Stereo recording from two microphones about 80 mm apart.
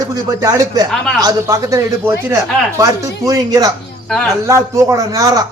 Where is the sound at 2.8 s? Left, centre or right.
Right.